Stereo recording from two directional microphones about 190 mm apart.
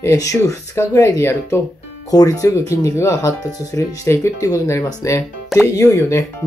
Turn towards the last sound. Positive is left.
turn(degrees=15)  # may be behind; listen again after turning